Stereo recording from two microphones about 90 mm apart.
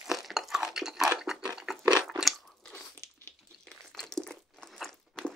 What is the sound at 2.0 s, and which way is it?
Crunch, 5° right (ahead or behind).